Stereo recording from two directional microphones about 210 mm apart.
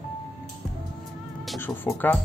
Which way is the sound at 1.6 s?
10° left (ahead or behind).